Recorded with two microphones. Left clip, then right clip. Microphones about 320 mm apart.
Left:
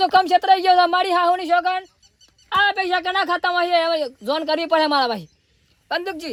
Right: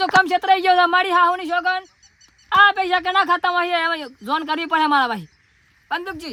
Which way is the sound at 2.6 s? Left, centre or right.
Right.